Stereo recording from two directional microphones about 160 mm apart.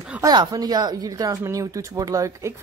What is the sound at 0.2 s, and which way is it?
Speech, 25° right (ahead or behind).